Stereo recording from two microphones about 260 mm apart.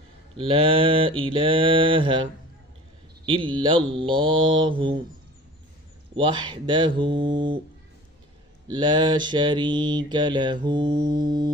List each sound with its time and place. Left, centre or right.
0.4 s mantra: right
3.3 s mantra: centre
6.1 s mantra: centre
8.6 s mantra: centre